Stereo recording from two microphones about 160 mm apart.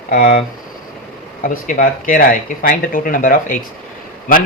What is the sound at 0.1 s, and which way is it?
Speech, 60° left (ahead or behind).